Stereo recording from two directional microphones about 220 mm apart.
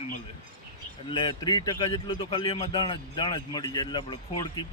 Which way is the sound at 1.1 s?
20° left (ahead or behind).